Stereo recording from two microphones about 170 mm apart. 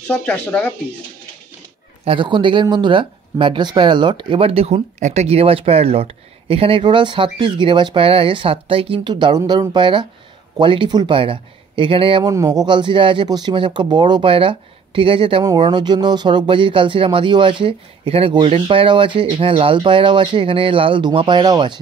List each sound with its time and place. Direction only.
0.1 s speech: 10° left (ahead or behind)
2.0 s speech: 30° right (ahead or behind)